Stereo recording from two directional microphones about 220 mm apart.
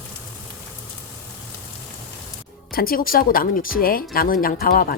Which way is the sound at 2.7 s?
40° left (ahead or behind).